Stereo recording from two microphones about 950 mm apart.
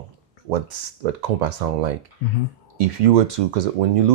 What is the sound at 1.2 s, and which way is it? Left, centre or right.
Speech, right.